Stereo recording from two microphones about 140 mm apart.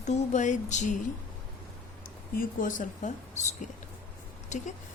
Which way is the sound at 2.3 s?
80° left.